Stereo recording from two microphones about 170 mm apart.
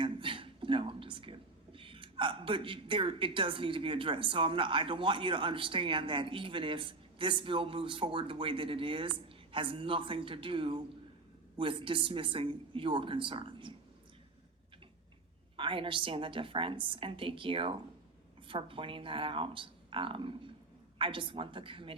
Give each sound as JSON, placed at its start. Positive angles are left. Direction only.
{"t": 0.0, "sound": "a man's voice", "side_deg": -30}
{"t": 15.5, "sound": "speech", "side_deg": -30}